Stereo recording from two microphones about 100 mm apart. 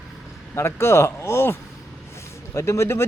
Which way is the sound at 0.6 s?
25° left (ahead or behind).